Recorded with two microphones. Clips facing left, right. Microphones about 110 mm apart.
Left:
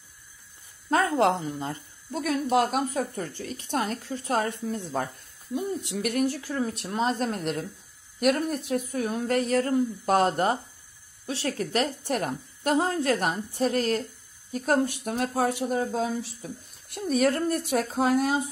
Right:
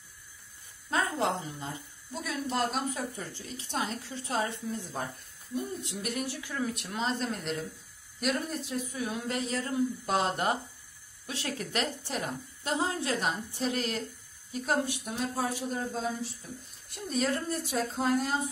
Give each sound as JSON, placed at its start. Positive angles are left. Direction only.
{"t": 0.8, "sound": "a woman's voice", "side_deg": 60}
{"t": 6.0, "sound": "a woman's voice", "side_deg": 60}
{"t": 6.4, "sound": "a woman's voice", "side_deg": 35}
{"t": 16.9, "sound": "speech", "side_deg": 65}